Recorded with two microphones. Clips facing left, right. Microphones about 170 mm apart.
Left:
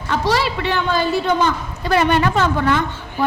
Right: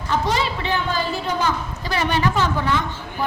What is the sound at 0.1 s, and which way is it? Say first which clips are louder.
Speech: left 3 dB; 75° left (ahead or behind).